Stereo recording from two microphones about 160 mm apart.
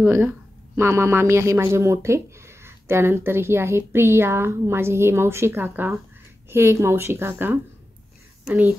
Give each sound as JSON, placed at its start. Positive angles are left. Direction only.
{"t": 0.0, "sound": "speech", "side_deg": -15}